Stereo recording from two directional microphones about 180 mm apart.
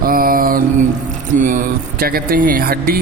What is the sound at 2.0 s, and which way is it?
Speech, 55° right (ahead or behind).